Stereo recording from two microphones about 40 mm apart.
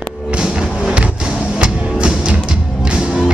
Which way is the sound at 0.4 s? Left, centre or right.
Right.